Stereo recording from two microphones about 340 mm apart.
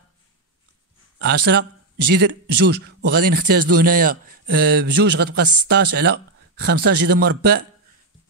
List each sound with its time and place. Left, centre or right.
1.2 s a man's voice: right